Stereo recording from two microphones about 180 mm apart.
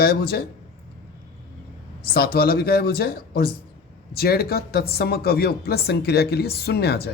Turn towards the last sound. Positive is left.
turn(degrees=60)  # may be behind; listen again after turning